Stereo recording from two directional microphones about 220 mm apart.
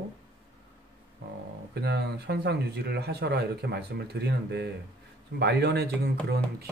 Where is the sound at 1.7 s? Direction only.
50° right (ahead or behind).